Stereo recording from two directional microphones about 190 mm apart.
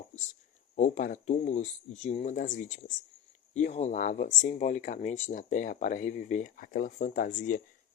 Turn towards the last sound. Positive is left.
turn(degrees=40)  # may be behind; listen again after turning